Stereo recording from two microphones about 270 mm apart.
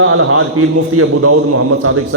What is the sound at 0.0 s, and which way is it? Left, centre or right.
Speech, right.